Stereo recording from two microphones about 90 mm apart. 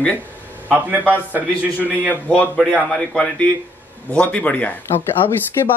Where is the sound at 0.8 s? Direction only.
15° right (ahead or behind).